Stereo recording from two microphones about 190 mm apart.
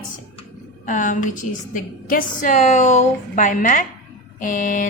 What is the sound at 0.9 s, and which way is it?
A woman's voice, 40° left (ahead or behind).